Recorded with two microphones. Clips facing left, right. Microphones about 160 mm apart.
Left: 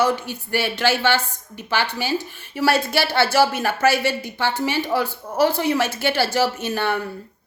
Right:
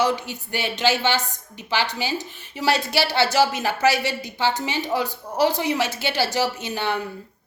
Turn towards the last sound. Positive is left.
turn(degrees=-15)  # may be behind; listen again after turning